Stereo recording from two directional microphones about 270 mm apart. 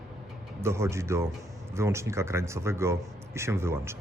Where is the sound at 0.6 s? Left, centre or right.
Centre.